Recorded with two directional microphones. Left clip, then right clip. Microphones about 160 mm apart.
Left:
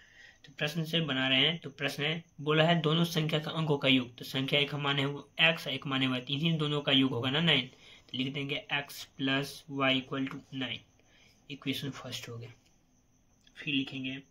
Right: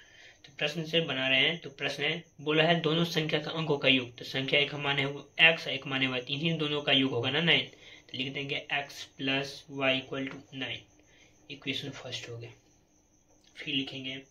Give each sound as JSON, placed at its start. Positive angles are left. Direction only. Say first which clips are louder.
{"t": 0.4, "sound": "speech", "louder": "right 2 dB", "side_deg": 45}
{"t": 13.6, "sound": "speech", "louder": "even", "side_deg": 40}